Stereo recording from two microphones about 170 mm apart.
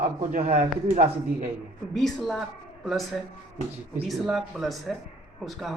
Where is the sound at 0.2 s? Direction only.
45° right (ahead or behind).